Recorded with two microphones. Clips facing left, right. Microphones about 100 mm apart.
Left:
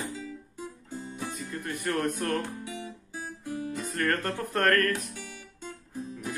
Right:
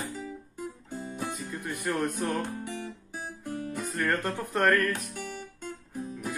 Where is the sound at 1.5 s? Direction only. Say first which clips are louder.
Left 2 dB; 10° right (ahead or behind).